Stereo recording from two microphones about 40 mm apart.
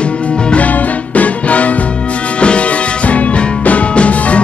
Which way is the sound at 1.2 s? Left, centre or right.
Left.